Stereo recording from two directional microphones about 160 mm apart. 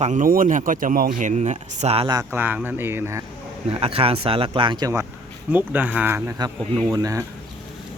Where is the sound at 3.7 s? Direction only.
35° right (ahead or behind).